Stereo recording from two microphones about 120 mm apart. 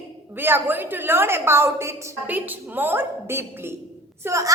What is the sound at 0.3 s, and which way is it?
A woman's voice, 15° right (ahead or behind).